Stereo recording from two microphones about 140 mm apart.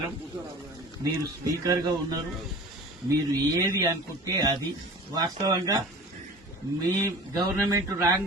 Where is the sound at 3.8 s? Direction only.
25° right (ahead or behind).